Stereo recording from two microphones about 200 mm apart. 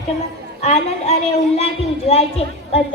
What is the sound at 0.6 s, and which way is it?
Speech, 30° left (ahead or behind).